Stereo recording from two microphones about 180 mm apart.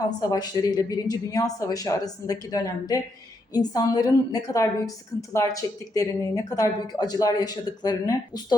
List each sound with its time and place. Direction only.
0.2 s speech: 20° left (ahead or behind)